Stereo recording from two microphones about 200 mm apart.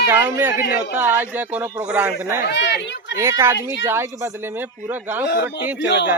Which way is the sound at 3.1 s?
10° right (ahead or behind).